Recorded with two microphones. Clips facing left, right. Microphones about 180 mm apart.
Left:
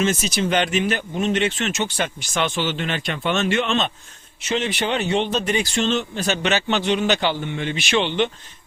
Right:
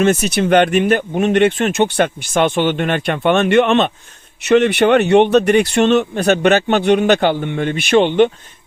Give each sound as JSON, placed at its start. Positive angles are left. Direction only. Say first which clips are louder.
{"t": 0.0, "sound": "speech", "louder": "right 7 dB", "side_deg": -60}